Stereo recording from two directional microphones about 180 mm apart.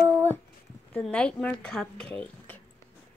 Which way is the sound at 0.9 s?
5° left (ahead or behind).